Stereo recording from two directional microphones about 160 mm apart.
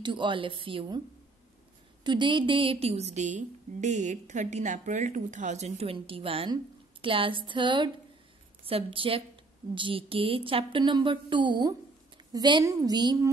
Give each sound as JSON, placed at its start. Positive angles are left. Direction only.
{"t": 0.0, "sound": "a woman's voice", "side_deg": -30}
{"t": 2.0, "sound": "a woman's voice", "side_deg": -30}